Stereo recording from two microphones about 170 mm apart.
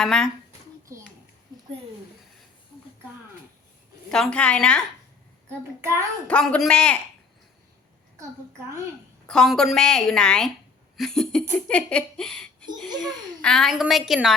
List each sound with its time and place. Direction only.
0.0 s a woman's voice: 5° left (ahead or behind)
0.9 s a child's voice: 15° right (ahead or behind)
4.1 s a woman's voice: 5° left (ahead or behind)
6.2 s speech: 5° left (ahead or behind)
9.2 s a woman's voice: 5° left (ahead or behind)